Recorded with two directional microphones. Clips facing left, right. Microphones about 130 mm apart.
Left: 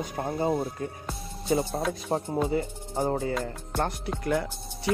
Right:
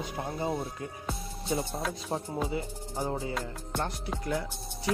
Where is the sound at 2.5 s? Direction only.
45° left (ahead or behind).